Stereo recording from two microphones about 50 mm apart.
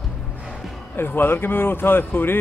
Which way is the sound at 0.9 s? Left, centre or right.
Left.